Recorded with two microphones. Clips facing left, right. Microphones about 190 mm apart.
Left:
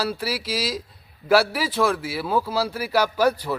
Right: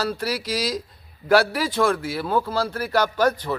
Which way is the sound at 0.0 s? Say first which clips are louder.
Right 1 dB; 5° left (ahead or behind).